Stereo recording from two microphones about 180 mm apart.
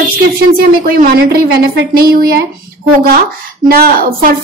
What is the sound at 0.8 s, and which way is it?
A woman's voice, 55° right (ahead or behind).